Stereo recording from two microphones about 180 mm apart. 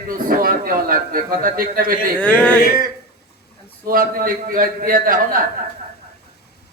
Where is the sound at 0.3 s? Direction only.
55° right (ahead or behind).